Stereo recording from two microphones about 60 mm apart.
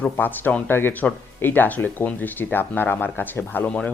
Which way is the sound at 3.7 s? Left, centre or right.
Centre.